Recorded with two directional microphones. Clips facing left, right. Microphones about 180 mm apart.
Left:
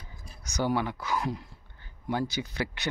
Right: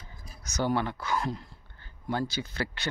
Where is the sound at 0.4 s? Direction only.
15° left (ahead or behind).